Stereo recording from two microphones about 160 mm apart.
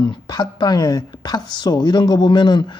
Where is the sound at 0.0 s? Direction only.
25° left (ahead or behind).